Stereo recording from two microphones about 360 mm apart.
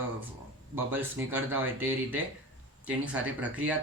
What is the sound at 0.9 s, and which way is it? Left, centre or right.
Speech, centre.